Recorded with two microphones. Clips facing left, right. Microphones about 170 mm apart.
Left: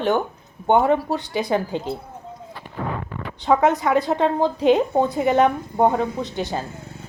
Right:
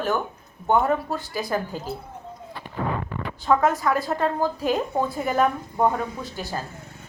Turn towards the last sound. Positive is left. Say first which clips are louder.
# left 4 dB
turn(degrees=25)  # may be behind; listen again after turning